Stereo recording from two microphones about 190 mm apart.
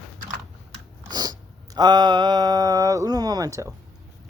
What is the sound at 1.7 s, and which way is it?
Speech, 20° right (ahead or behind).